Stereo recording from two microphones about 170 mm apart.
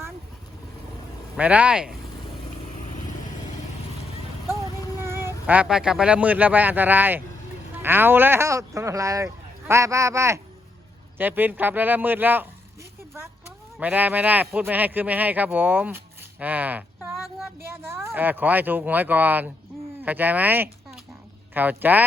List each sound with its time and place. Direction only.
1.4 s a man's voice: 10° right (ahead or behind)
4.9 s a sound: 15° right (ahead or behind)
5.5 s a man's voice: 5° right (ahead or behind)
13.7 s a man's voice: 10° right (ahead or behind)
16.4 s a sound: 10° right (ahead or behind)
17.9 s a man's voice: 15° right (ahead or behind)